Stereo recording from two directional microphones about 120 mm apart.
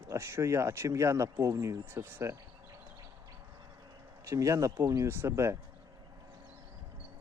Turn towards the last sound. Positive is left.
turn(degrees=-20)  # may be behind; listen again after turning